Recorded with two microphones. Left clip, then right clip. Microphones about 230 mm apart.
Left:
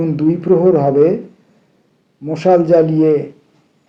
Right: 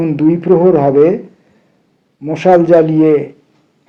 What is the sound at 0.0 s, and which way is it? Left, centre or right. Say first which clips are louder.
Speech: right 3 dB; right.